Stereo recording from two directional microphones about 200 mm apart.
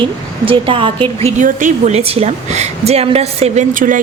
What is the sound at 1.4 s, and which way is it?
A woman's voice, 40° right (ahead or behind).